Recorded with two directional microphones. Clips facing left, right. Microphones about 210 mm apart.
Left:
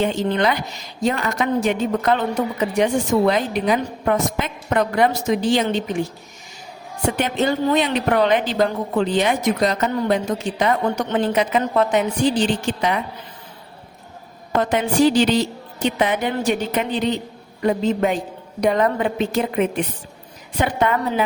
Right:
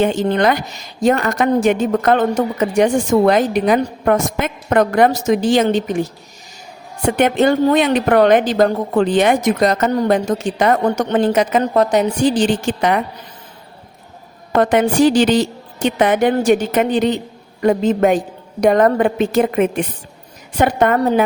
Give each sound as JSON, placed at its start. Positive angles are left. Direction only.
{"t": 0.0, "sound": "a woman's voice", "side_deg": -50}
{"t": 7.2, "sound": "a woman's voice", "side_deg": -55}
{"t": 14.6, "sound": "a woman's voice", "side_deg": -50}